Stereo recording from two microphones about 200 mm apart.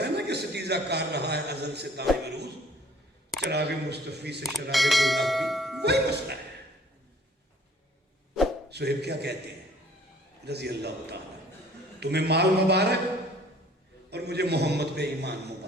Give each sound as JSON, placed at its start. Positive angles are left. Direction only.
{"t": 0.0, "sound": "a man's voice", "side_deg": -55}
{"t": 4.7, "sound": "speech", "side_deg": 0}
{"t": 5.8, "sound": "a man's voice", "side_deg": -55}
{"t": 8.7, "sound": "a man's voice", "side_deg": -55}
{"t": 10.4, "sound": "a man's voice", "side_deg": -55}
{"t": 14.1, "sound": "a man's voice", "side_deg": -55}